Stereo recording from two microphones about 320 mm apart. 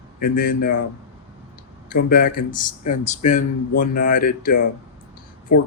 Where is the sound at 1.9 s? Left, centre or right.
Left.